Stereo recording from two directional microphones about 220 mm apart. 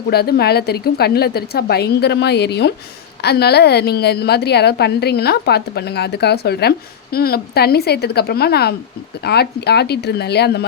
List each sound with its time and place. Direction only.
0.1 s a woman's voice: 45° left (ahead or behind)